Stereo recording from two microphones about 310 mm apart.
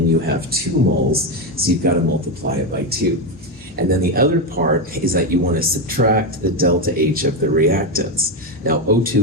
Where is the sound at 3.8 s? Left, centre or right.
Right.